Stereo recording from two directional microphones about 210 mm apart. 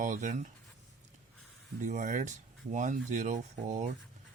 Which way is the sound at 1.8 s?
35° right (ahead or behind).